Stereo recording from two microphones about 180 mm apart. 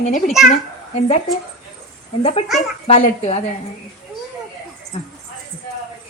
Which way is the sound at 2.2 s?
35° left (ahead or behind).